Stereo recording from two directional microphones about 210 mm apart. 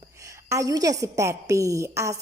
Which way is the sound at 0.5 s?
15° right (ahead or behind).